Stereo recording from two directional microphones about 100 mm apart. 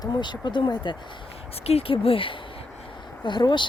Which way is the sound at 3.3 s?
50° left (ahead or behind).